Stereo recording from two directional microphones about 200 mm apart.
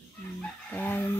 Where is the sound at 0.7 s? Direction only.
10° left (ahead or behind).